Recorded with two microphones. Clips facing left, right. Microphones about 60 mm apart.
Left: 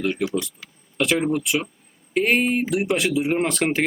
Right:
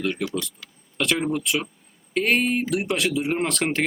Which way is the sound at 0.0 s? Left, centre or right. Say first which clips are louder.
Left 2 dB; centre.